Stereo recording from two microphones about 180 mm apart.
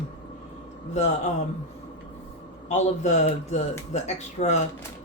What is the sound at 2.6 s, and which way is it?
Speech, 40° left (ahead or behind).